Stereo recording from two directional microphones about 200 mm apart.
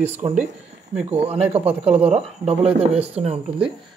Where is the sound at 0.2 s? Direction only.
20° right (ahead or behind).